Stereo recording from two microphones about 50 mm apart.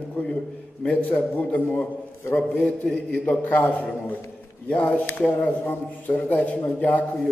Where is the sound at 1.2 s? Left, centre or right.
Left.